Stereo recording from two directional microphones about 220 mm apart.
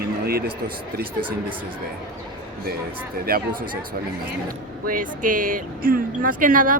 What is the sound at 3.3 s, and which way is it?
Speech, 40° right (ahead or behind).